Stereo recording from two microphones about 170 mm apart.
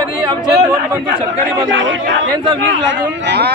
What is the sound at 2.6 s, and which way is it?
Speech, 90° right.